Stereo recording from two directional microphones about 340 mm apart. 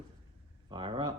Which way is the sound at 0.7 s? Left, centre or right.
Centre.